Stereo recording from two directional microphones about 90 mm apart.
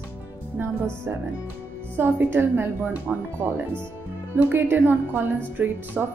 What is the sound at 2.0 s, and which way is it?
Speech, 25° right (ahead or behind).